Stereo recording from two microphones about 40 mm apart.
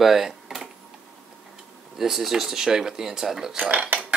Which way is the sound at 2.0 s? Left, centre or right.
Centre.